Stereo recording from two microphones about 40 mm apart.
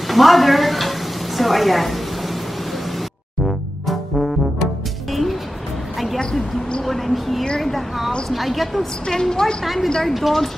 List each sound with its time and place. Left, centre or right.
0.1 s stir: centre
3.8 s brass instrument: centre
5.1 s music: centre
6.9 s a sound: centre
8.3 s a woman's voice: centre
9.0 s a woman's voice: centre
10.0 s a woman's voice: centre